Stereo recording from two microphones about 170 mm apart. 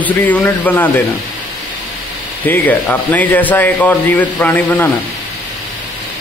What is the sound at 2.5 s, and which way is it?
Speech, 10° left (ahead or behind).